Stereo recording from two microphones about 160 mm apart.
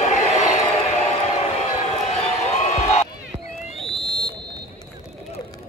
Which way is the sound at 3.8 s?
Centre (ahead or behind).